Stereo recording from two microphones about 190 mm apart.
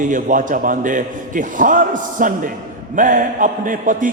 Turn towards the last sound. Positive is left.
turn(degrees=-45)  # may be behind; listen again after turning